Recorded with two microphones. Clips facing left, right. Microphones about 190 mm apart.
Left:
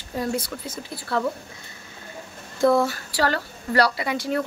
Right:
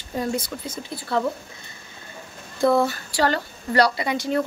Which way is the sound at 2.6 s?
15° right (ahead or behind).